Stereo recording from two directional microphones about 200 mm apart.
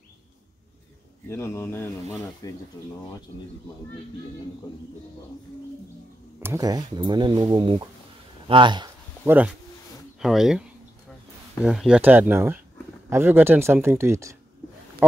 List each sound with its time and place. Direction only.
1.3 s speech: 15° left (ahead or behind)
6.4 s speech: 15° right (ahead or behind)
9.2 s speech: 10° right (ahead or behind)